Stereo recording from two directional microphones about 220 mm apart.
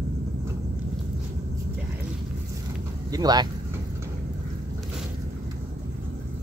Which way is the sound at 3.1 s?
15° right (ahead or behind).